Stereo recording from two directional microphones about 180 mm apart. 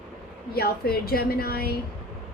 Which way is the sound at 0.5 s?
60° left (ahead or behind).